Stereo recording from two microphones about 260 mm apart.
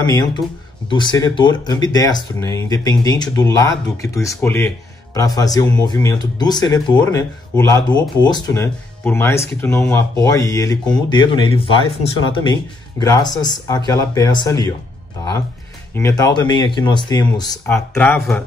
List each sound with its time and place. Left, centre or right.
0.0 s a man's voice: centre
15.9 s a man's voice: centre